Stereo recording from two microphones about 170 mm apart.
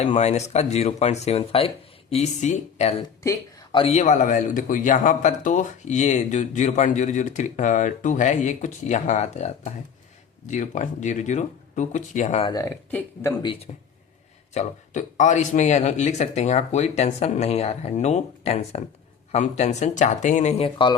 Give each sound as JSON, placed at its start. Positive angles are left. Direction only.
{"t": 0.0, "sound": "speech", "side_deg": 40}
{"t": 3.0, "sound": "speech", "side_deg": 25}
{"t": 12.5, "sound": "speech", "side_deg": 20}
{"t": 12.9, "sound": "speech", "side_deg": 10}
{"t": 13.7, "sound": "speech", "side_deg": 40}